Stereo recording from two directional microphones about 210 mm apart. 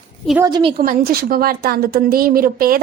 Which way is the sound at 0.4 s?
20° right (ahead or behind).